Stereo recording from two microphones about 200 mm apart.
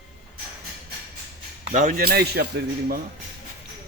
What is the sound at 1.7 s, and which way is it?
Speech, 40° right (ahead or behind).